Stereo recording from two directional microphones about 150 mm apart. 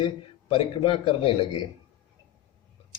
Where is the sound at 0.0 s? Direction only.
40° left (ahead or behind).